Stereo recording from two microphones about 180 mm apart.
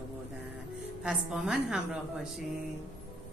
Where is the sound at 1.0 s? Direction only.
5° right (ahead or behind).